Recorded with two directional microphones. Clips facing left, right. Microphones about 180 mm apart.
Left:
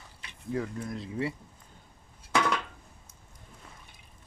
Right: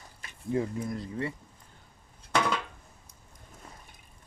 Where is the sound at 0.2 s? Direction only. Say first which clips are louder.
Even; 45° right (ahead or behind).